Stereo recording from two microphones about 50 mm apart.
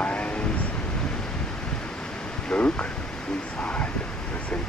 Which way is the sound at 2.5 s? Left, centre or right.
Left.